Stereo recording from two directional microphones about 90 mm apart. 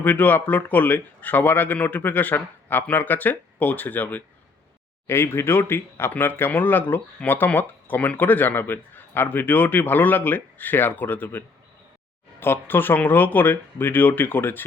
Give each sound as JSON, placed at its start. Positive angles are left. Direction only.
{"t": 0.0, "sound": "speech", "side_deg": 20}